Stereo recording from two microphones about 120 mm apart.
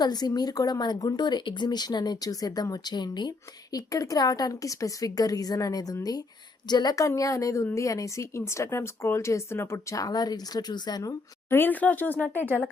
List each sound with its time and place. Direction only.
0.0 s a woman's voice: 35° left (ahead or behind); by 12.6 s 15° left (ahead or behind)